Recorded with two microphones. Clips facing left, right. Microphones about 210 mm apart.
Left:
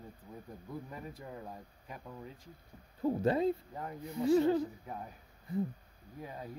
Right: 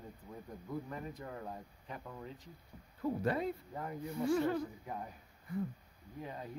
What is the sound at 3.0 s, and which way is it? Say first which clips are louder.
Speech: left 5 dB; 25° left (ahead or behind).